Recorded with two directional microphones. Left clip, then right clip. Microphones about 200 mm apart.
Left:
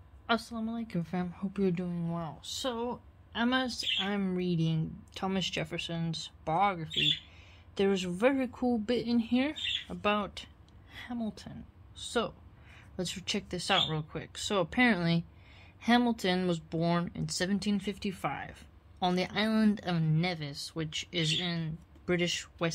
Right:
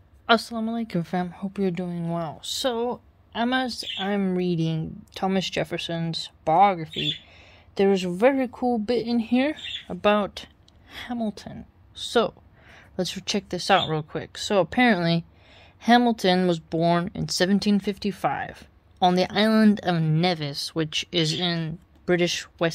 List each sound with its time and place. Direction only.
0.3 s speech: 50° right (ahead or behind)